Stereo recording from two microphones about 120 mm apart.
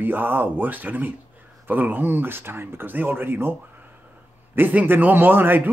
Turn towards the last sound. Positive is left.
turn(degrees=-15)  # may be behind; listen again after turning